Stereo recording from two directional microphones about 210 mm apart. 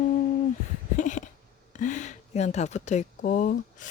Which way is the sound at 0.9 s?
35° left (ahead or behind).